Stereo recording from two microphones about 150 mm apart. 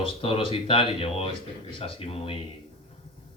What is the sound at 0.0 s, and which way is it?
Speech, 35° left (ahead or behind).